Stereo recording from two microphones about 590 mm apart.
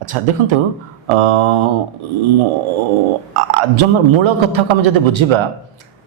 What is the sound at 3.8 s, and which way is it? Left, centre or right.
A man's voice, right.